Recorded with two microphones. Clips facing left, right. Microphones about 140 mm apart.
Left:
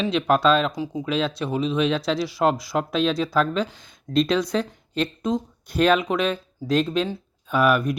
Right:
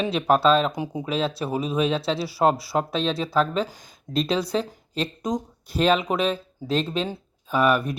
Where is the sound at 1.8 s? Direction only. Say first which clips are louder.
Even; 30° right (ahead or behind).